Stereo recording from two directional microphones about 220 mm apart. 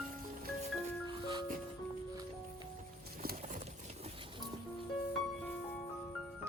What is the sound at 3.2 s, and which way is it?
Horse, 40° right (ahead or behind).